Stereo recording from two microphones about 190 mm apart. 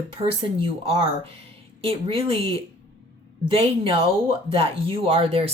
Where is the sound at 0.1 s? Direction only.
30° right (ahead or behind).